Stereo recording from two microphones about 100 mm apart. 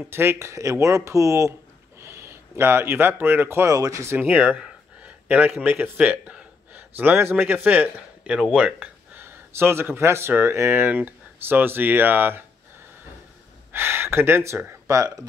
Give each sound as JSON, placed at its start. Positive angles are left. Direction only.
{"t": 0.1, "sound": "speech", "side_deg": -25}
{"t": 4.2, "sound": "speech", "side_deg": -15}
{"t": 8.5, "sound": "a sound", "side_deg": -10}
{"t": 9.2, "sound": "speech", "side_deg": -25}
{"t": 13.7, "sound": "gasp", "side_deg": -25}
{"t": 14.9, "sound": "speech", "side_deg": -35}